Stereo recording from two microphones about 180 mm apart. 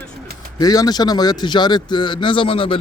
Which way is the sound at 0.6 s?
20° left (ahead or behind).